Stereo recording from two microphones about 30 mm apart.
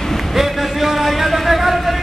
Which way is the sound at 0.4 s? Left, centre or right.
Centre.